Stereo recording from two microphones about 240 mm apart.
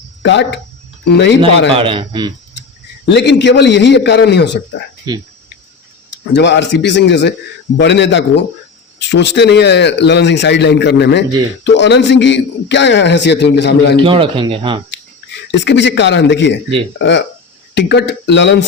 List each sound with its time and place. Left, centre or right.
0.2 s speech: left
1.4 s a man's voice: right
3.1 s speech: left
5.1 s speech: centre
6.3 s speech: left
13.9 s a man's voice: right
14.8 s speech: left